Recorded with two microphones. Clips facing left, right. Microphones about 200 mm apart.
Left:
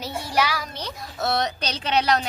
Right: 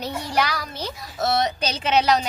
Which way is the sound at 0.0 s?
5° left (ahead or behind).